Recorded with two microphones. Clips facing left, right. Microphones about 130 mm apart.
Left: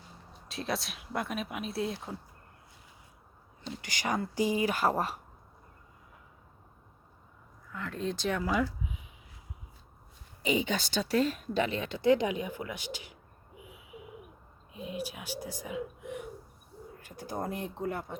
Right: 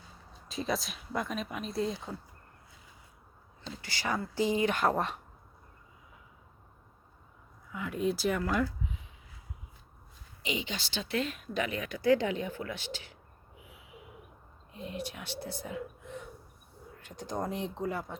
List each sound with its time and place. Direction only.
0.4 s speech: centre (ahead or behind)
3.8 s speech: 15° left (ahead or behind)
7.7 s speech: 10° right (ahead or behind); by 9.0 s 10° left (ahead or behind)
10.6 s speech: 40° left (ahead or behind); by 13.1 s 15° left (ahead or behind)
14.7 s speech: 10° left (ahead or behind)